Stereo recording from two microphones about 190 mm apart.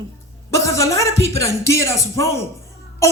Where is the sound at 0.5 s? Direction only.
15° left (ahead or behind).